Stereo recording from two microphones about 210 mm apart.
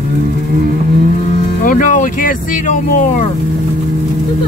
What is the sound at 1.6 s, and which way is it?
Vehicle, 40° left (ahead or behind).